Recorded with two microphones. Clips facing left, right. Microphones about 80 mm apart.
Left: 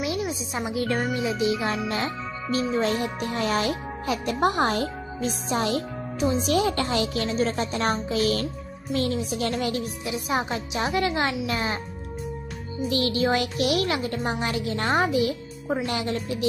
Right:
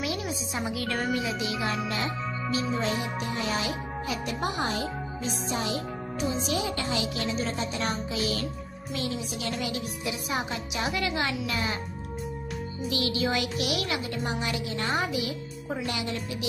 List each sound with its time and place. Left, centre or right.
0.0 s music: left
1.1 s speech: left
10.0 s speech: left
12.9 s speech: left